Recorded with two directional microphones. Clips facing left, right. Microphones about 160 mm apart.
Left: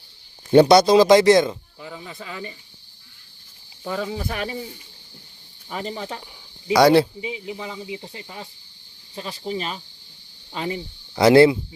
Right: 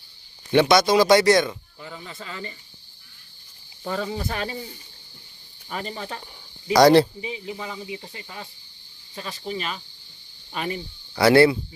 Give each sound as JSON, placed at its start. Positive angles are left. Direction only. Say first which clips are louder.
{"t": 0.5, "sound": "speech", "louder": "left 5 dB", "side_deg": 30}
{"t": 1.8, "sound": "speech", "louder": "even", "side_deg": 10}
{"t": 3.8, "sound": "speech", "louder": "left 1 dB", "side_deg": 5}
{"t": 10.5, "sound": "speech", "louder": "left 1 dB", "side_deg": 20}